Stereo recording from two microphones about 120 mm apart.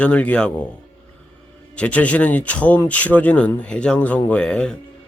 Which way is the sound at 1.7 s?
10° left (ahead or behind).